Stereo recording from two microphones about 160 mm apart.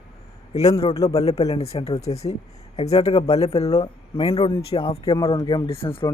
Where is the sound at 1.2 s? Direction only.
40° left (ahead or behind).